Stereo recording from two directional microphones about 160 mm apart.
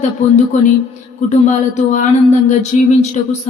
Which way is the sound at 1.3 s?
50° left (ahead or behind).